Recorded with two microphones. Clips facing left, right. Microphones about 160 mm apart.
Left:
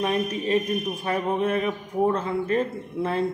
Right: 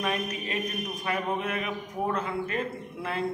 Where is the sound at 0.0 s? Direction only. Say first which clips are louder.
Left 6 dB; 30° left (ahead or behind).